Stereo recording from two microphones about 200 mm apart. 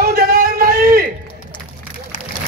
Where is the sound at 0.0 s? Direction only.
45° right (ahead or behind).